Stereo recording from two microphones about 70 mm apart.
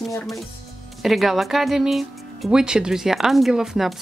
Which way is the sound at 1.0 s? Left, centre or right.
Centre.